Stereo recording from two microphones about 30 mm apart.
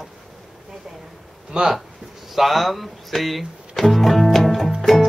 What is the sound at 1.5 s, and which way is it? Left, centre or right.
Speech, centre.